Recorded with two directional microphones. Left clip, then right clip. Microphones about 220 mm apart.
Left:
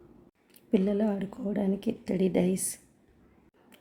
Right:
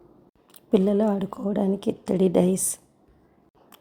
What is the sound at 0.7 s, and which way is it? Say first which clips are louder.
A woman's voice: right 6 dB; 15° right (ahead or behind).